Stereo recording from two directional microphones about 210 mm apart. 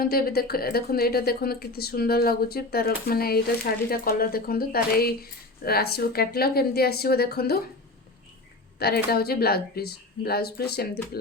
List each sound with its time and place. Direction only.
0.0 s speech: 45° left (ahead or behind)
8.8 s speech: 50° left (ahead or behind)